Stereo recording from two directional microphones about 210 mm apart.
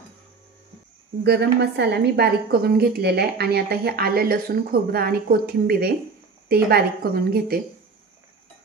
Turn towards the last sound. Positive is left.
turn(degrees=-45)  # may be behind; listen again after turning